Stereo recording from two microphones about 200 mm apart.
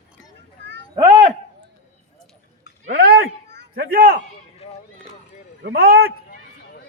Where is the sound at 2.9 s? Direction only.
50° right (ahead or behind).